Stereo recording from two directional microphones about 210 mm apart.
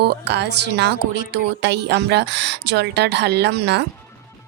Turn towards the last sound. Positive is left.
turn(degrees=-50)  # may be behind; listen again after turning